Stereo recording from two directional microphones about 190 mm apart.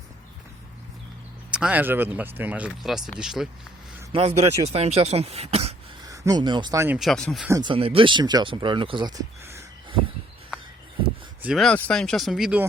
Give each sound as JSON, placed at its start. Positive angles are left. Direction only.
{"t": 1.5, "sound": "speech", "side_deg": -5}
{"t": 4.1, "sound": "speech", "side_deg": -30}
{"t": 6.0, "sound": "speech", "side_deg": -20}
{"t": 7.0, "sound": "speech", "side_deg": 0}
{"t": 7.5, "sound": "speech", "side_deg": -25}
{"t": 11.4, "sound": "speech", "side_deg": 0}